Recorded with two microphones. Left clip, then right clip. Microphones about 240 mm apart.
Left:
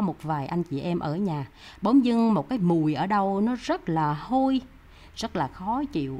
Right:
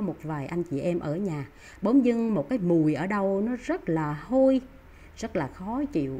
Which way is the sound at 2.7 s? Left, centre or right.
Centre.